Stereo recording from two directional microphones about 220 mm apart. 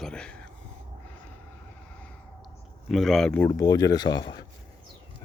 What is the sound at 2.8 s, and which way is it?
Speech, centre (ahead or behind).